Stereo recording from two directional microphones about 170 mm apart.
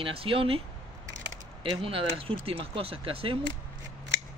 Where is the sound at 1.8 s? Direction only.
30° right (ahead or behind).